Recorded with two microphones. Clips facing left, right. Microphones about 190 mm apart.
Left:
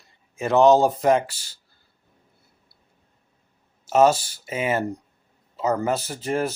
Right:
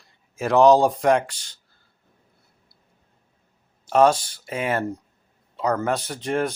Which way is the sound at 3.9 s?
5° left (ahead or behind).